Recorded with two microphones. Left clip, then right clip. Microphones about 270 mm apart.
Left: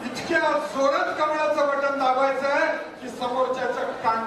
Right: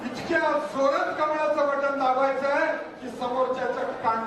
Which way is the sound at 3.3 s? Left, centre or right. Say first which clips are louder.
Left 1 dB; right.